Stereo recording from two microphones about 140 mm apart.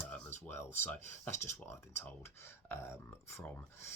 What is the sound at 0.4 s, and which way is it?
Speech, 15° left (ahead or behind).